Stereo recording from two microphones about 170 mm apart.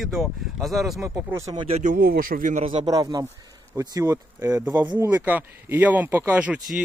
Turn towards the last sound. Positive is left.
turn(degrees=-5)  # may be behind; listen again after turning